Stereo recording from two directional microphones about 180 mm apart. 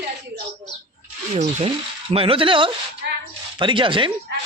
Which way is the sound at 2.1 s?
30° right (ahead or behind).